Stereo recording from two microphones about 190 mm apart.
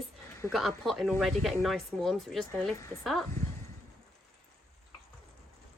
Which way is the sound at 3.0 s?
Centre (ahead or behind).